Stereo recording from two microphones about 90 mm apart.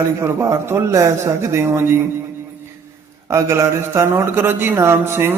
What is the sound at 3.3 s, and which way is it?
Speech, 30° right (ahead or behind).